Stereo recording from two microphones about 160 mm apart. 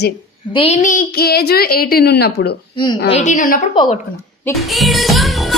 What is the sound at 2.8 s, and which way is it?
Speech, 30° left (ahead or behind).